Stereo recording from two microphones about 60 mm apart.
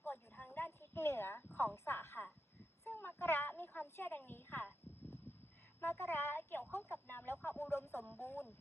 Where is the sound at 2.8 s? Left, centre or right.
Left.